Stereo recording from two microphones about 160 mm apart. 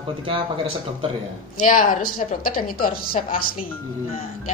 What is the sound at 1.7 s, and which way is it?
A woman's voice, 55° left (ahead or behind).